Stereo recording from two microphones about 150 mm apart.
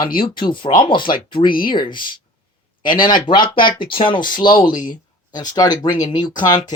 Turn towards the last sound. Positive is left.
turn(degrees=30)  # may be behind; listen again after turning